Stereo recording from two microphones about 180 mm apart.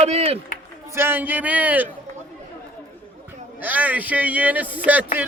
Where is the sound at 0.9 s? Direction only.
10° right (ahead or behind).